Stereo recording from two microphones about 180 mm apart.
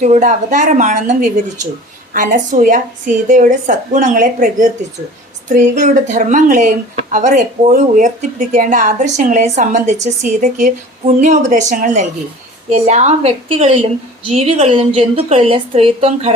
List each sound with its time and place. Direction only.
0.0 s speech: 40° right (ahead or behind)
2.1 s a woman's voice: 45° right (ahead or behind)